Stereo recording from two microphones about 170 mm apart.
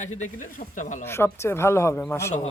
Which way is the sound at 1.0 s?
15° left (ahead or behind).